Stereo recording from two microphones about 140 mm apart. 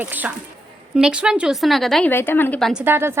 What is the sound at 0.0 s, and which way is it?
A woman's voice, 10° right (ahead or behind).